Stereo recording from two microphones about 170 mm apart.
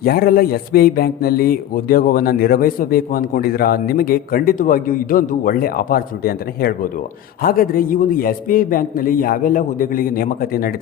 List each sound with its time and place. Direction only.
0.0 s speech: 60° left (ahead or behind)